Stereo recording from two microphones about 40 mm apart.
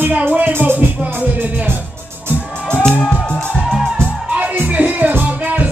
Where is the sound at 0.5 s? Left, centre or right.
Right.